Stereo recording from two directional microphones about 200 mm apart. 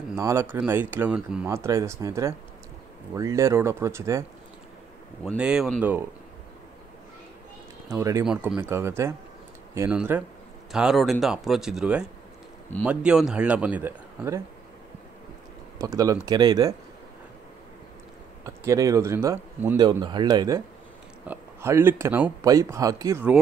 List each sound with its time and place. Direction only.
0.1 s speech: 15° right (ahead or behind)
5.2 s speech: 5° right (ahead or behind)
7.9 s speech: 15° right (ahead or behind)
15.8 s speech: 15° right (ahead or behind)
18.4 s speech: 15° right (ahead or behind)